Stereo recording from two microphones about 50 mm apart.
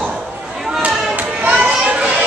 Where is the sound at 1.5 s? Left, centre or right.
Right.